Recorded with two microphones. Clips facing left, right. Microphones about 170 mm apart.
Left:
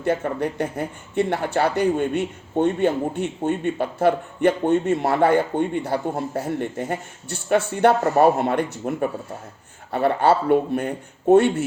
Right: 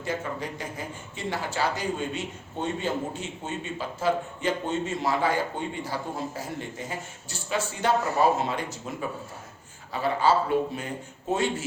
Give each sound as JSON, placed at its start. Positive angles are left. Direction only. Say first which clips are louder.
{"t": 0.0, "sound": "speech", "louder": "left 9 dB", "side_deg": 60}